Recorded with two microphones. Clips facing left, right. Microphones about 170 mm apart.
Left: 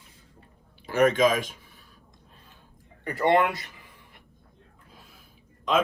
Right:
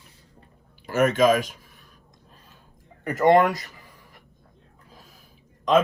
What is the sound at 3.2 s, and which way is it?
Speech, 45° right (ahead or behind).